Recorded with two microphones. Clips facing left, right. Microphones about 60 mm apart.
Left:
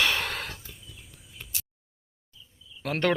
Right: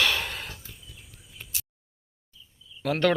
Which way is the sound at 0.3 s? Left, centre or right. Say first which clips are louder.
Left 3 dB; left.